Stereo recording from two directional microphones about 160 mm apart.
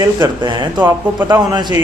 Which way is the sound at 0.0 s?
25° right (ahead or behind).